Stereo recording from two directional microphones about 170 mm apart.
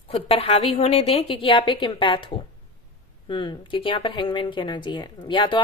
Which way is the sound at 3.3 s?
25° left (ahead or behind).